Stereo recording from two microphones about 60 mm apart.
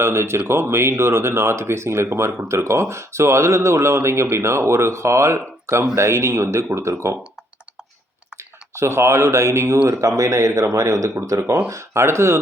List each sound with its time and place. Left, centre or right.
0.0 s speech: right
8.7 s speech: right
9.9 s speech: right
11.7 s speech: right